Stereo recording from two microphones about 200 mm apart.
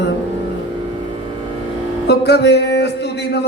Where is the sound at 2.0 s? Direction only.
55° left (ahead or behind).